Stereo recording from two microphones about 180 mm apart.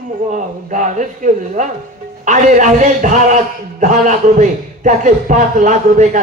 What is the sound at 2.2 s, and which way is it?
Speech, 45° right (ahead or behind).